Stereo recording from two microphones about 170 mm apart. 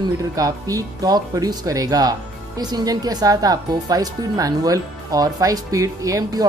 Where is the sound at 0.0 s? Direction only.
20° right (ahead or behind).